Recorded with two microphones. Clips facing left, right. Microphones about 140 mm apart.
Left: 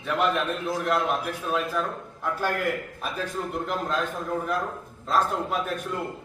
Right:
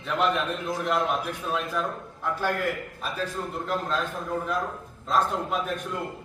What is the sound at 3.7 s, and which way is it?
A man's voice, 10° left (ahead or behind).